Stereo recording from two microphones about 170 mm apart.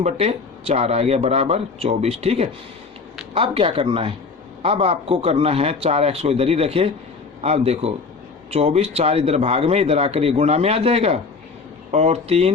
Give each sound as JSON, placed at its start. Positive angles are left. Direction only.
{"t": 0.0, "sound": "speech", "side_deg": -40}